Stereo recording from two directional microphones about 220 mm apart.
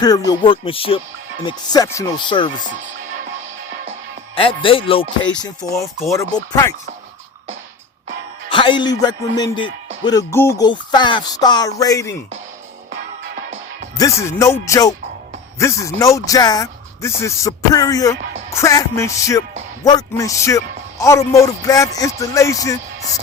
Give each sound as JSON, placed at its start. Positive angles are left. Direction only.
{"t": 0.0, "sound": "speech", "side_deg": 15}
{"t": 4.4, "sound": "speech", "side_deg": 25}
{"t": 5.4, "sound": "speech", "side_deg": 15}
{"t": 8.4, "sound": "speech", "side_deg": 20}
{"t": 13.9, "sound": "speech", "side_deg": 15}